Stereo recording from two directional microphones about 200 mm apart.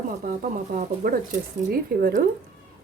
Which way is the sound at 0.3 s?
45° right (ahead or behind).